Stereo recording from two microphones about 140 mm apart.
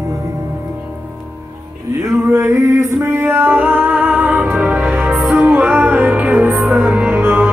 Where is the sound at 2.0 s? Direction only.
20° right (ahead or behind).